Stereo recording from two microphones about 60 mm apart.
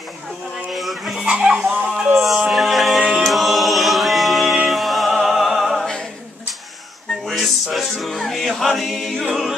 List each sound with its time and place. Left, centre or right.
0.7 s a sound: centre
1.2 s speech: centre
2.1 s music: centre
3.0 s choir: centre
3.3 s choir: centre
4.6 s music: centre
7.2 s music: centre